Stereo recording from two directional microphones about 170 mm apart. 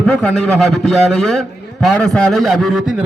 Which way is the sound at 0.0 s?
5° left (ahead or behind).